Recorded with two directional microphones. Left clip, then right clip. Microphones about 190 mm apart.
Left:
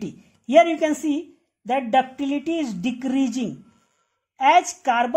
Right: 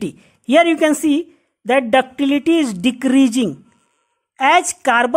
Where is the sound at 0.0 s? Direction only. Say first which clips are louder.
Right 8 dB; 40° right (ahead or behind).